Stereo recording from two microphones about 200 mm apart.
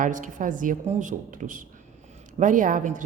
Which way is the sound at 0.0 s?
40° right (ahead or behind).